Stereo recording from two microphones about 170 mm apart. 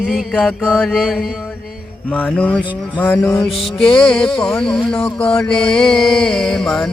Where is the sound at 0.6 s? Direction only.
10° left (ahead or behind).